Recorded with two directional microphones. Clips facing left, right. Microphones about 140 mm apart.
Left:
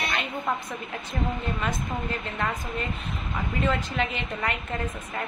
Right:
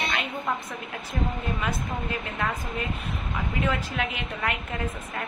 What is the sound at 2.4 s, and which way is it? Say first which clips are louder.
Speech: even; 5° right (ahead or behind).